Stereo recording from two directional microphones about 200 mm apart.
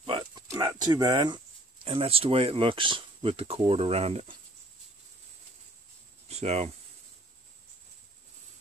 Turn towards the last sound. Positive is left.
turn(degrees=-30)  # may be behind; listen again after turning